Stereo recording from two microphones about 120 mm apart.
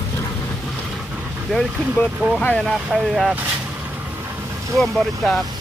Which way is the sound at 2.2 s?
15° right (ahead or behind).